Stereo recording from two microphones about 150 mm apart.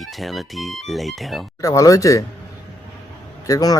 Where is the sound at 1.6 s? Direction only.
20° left (ahead or behind).